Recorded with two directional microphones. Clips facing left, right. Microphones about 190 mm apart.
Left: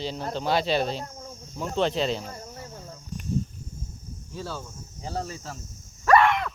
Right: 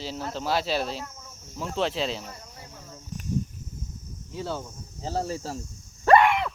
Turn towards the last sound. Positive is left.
turn(degrees=-10)  # may be behind; listen again after turning